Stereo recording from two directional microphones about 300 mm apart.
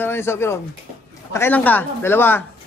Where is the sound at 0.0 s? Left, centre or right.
Centre.